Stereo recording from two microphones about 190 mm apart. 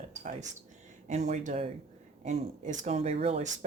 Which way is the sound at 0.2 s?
40° right (ahead or behind).